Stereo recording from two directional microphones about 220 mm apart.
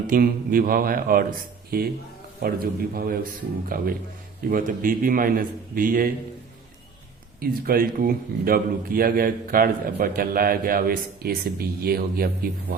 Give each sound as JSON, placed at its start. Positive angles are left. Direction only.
{"t": 0.1, "sound": "a man's voice", "side_deg": -40}
{"t": 2.4, "sound": "a man's voice", "side_deg": -40}
{"t": 7.3, "sound": "a man's voice", "side_deg": -40}